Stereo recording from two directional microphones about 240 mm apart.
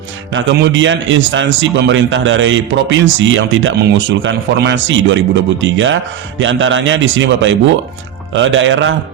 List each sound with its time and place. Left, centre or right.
0.3 s a man's voice: right